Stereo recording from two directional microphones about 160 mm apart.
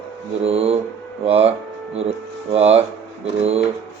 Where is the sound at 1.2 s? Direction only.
40° right (ahead or behind).